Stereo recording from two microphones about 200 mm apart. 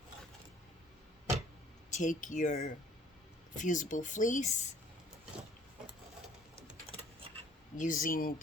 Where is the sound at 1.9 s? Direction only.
40° left (ahead or behind).